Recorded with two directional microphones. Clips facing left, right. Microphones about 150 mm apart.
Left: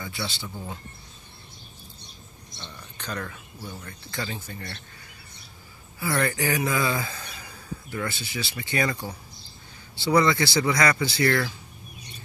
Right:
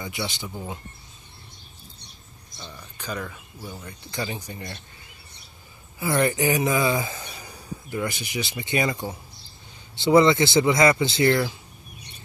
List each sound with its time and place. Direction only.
0.0 s speech: 20° right (ahead or behind)
2.5 s speech: 5° right (ahead or behind)
4.1 s speech: 20° right (ahead or behind)
5.9 s a man's voice: 20° right (ahead or behind)